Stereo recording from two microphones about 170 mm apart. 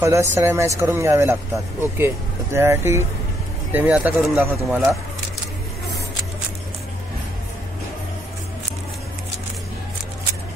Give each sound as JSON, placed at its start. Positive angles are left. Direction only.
{"t": 0.0, "sound": "speech", "side_deg": -15}